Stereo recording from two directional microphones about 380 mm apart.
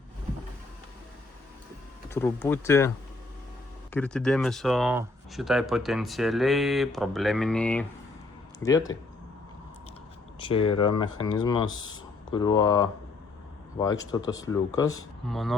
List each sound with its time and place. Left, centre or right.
2.0 s speech: centre
3.9 s speech: centre
10.4 s speech: centre